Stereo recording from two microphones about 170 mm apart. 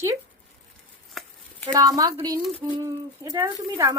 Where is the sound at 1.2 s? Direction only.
Centre (ahead or behind).